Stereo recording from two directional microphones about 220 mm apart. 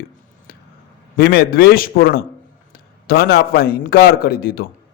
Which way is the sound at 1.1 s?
45° left (ahead or behind).